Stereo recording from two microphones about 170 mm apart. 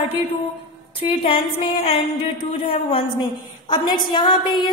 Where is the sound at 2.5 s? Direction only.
35° left (ahead or behind).